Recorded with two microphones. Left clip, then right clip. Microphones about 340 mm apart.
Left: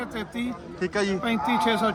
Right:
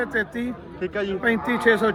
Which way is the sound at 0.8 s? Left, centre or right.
Centre.